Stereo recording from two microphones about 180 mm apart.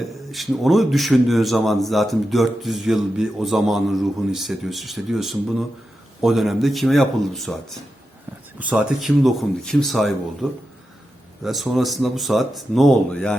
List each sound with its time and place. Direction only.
0.0 s a man's voice: centre (ahead or behind)